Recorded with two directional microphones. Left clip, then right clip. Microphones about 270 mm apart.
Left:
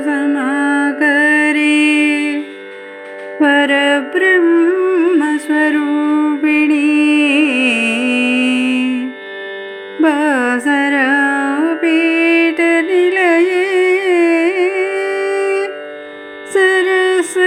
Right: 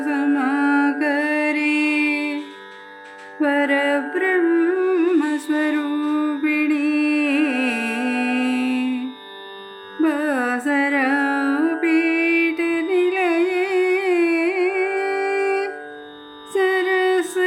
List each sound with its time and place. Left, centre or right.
0.0 s mantra: centre
3.4 s music: centre